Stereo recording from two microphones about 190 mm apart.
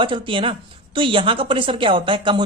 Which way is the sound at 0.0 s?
25° right (ahead or behind).